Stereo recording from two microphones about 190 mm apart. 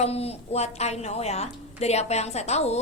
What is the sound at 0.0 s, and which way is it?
A woman's voice, 30° left (ahead or behind).